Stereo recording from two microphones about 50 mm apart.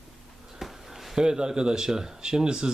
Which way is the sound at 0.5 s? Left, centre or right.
Centre.